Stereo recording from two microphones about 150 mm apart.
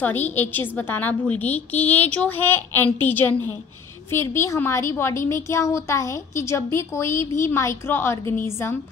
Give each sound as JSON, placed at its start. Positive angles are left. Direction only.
{"t": 0.0, "sound": "a woman's voice", "side_deg": 10}